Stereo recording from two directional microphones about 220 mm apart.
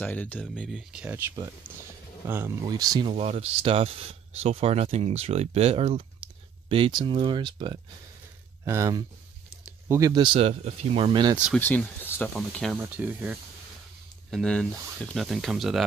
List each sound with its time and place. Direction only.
0.0 s speech: 5° left (ahead or behind); by 11.3 s 20° right (ahead or behind)
11.3 s speech: 5° right (ahead or behind)
11.6 s speech: 10° left (ahead or behind)
12.7 s speech: 10° right (ahead or behind)
14.3 s speech: 5° left (ahead or behind)